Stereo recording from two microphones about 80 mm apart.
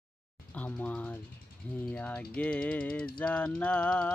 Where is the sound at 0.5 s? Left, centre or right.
Centre.